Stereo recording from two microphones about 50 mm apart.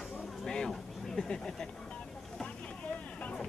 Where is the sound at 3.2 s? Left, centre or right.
Centre.